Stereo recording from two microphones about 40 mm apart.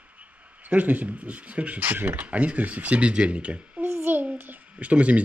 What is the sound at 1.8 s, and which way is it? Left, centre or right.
Speech, right.